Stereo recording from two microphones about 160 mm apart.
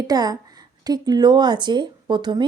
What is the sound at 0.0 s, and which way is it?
Speech, 25° right (ahead or behind).